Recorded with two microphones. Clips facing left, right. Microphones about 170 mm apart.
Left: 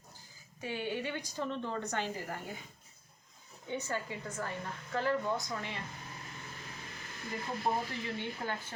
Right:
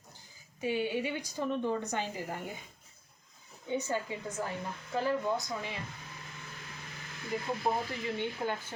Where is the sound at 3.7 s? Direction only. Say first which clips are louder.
Right 4 dB; 15° right (ahead or behind).